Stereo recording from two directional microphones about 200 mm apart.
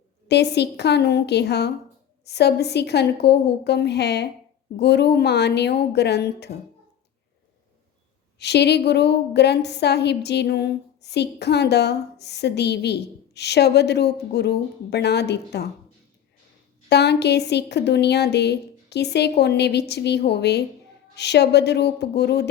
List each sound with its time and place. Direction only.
0.3 s a woman's voice: 55° left (ahead or behind)
8.4 s a woman's voice: 55° left (ahead or behind)
16.9 s a woman's voice: 55° left (ahead or behind)